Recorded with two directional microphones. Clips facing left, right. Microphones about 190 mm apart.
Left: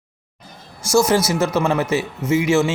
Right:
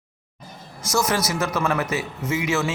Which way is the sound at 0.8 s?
30° left (ahead or behind).